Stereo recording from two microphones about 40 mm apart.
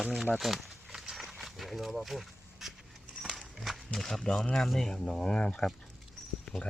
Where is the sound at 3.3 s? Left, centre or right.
Centre.